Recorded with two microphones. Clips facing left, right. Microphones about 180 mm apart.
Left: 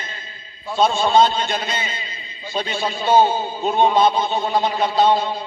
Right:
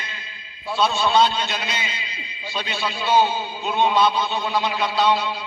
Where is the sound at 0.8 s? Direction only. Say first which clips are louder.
Left 3 dB; 50° left (ahead or behind).